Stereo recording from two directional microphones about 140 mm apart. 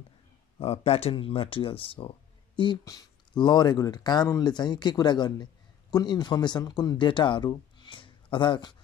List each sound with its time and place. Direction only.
0.6 s speech: 45° left (ahead or behind)